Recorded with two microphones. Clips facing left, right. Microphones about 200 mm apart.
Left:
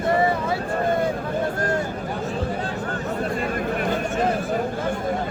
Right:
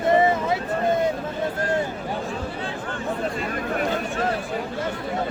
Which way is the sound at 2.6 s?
40° left (ahead or behind).